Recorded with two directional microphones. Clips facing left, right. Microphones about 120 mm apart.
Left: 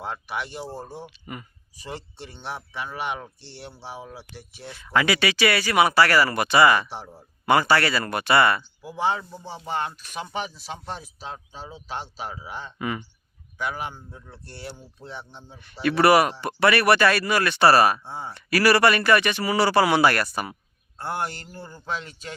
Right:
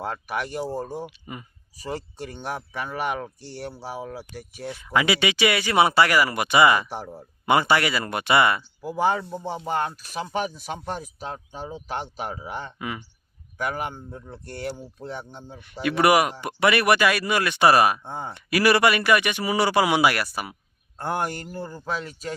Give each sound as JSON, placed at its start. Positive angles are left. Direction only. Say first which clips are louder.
{"t": 0.0, "sound": "speech", "louder": "right 2 dB", "side_deg": -45}
{"t": 1.0, "sound": "speech", "louder": "right 1 dB", "side_deg": -15}
{"t": 1.8, "sound": "speech", "louder": "right 5 dB", "side_deg": -40}
{"t": 4.6, "sound": "speech", "louder": "even", "side_deg": -15}
{"t": 8.8, "sound": "speech", "louder": "right 6 dB", "side_deg": -45}
{"t": 9.6, "sound": "speech", "louder": "even", "side_deg": -40}
{"t": 10.6, "sound": "speech", "louder": "right 4 dB", "side_deg": -50}
{"t": 12.8, "sound": "speech", "louder": "left 3 dB", "side_deg": -5}
{"t": 13.9, "sound": "speech", "louder": "right 5 dB", "side_deg": -45}
{"t": 15.5, "sound": "speech", "louder": "left 2 dB", "side_deg": -15}
{"t": 21.0, "sound": "speech", "louder": "right 3 dB", "side_deg": -45}